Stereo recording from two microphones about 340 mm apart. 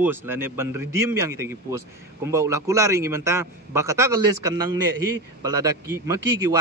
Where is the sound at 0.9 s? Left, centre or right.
Right.